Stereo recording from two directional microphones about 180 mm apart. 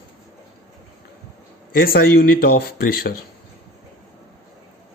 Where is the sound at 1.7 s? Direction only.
55° left (ahead or behind).